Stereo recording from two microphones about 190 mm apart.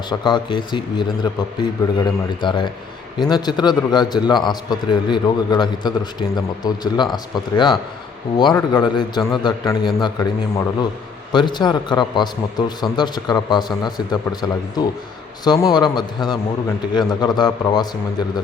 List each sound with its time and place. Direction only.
0.1 s a man's voice: 25° left (ahead or behind)